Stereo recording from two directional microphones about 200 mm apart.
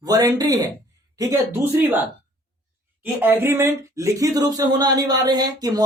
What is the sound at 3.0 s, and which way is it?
Speech, 10° right (ahead or behind).